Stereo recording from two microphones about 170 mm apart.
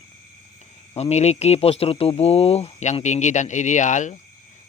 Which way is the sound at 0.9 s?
40° left (ahead or behind).